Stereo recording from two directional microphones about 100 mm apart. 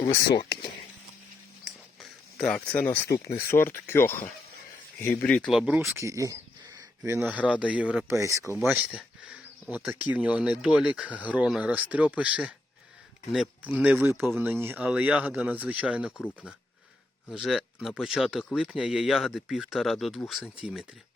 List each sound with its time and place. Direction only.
1.6 s a sound: 5° left (ahead or behind)
3.0 s speech: 30° left (ahead or behind)
5.2 s speech: 10° left (ahead or behind)
5.5 s speech: 10° right (ahead or behind)
5.9 s a sound: 30° right (ahead or behind)
7.4 s speech: 10° right (ahead or behind)
8.0 s speech: 30° right (ahead or behind)
8.6 s speech: 15° right (ahead or behind)
13.6 s speech: 15° right (ahead or behind)
17.3 s speech: centre (ahead or behind)